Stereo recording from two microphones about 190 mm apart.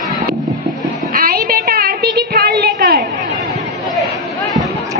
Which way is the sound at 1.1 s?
50° right (ahead or behind).